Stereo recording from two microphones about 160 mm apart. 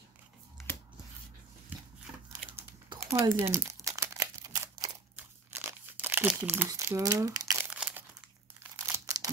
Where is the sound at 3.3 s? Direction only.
15° right (ahead or behind).